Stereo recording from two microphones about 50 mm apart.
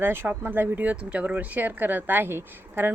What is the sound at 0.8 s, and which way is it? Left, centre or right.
A woman's voice, right.